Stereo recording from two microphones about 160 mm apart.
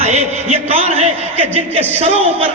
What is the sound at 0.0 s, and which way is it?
A man's voice, 45° right (ahead or behind).